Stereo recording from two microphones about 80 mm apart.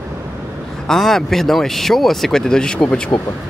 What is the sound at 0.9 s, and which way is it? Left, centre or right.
Speech, centre.